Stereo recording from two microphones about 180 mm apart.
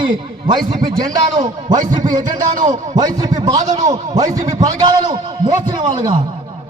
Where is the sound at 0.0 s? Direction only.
25° right (ahead or behind).